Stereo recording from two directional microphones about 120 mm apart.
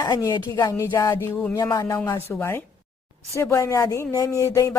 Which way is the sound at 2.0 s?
20° left (ahead or behind).